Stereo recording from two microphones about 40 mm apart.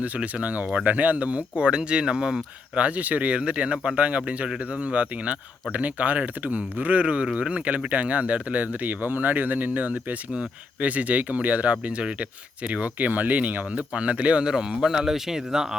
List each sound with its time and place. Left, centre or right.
0.0 s speech: right
13.7 s speech: right
14.5 s speech: centre